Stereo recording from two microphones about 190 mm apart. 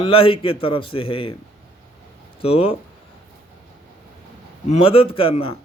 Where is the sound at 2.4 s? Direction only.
30° left (ahead or behind).